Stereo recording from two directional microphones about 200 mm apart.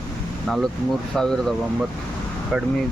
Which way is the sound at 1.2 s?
Centre (ahead or behind).